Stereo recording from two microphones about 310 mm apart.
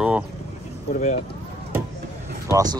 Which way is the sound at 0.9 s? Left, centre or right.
Left.